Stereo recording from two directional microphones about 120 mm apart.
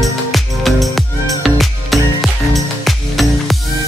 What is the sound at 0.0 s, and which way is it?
Music, centre (ahead or behind).